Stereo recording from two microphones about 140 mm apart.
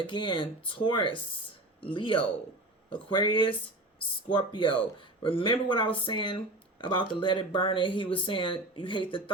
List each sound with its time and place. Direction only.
0.0 s speech: 35° left (ahead or behind)